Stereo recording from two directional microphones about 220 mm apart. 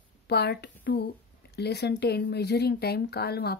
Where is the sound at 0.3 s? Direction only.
50° left (ahead or behind).